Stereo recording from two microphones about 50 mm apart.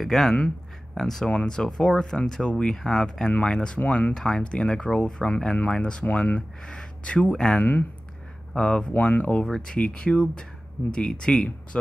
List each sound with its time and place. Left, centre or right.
0.0 s speech: centre; by 4.1 s left
4.1 s speech: centre
8.9 s speech: left